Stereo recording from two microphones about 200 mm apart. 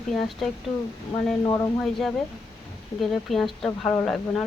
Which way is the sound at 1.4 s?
15° left (ahead or behind).